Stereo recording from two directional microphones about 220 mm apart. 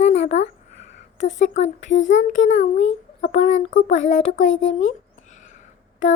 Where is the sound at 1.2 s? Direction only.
30° left (ahead or behind).